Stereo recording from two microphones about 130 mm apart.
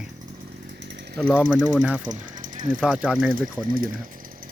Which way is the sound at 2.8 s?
10° right (ahead or behind).